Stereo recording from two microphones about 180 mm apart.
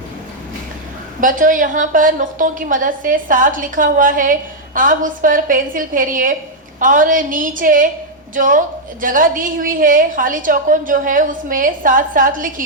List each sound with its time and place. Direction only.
1.2 s a woman's voice: 45° right (ahead or behind)